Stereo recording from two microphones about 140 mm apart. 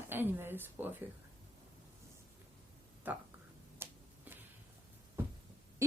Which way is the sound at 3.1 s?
10° right (ahead or behind).